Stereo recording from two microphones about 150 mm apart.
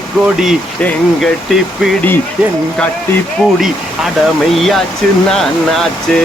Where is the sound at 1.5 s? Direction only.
Centre (ahead or behind).